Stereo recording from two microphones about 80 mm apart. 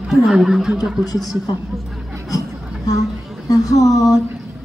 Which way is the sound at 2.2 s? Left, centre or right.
Left.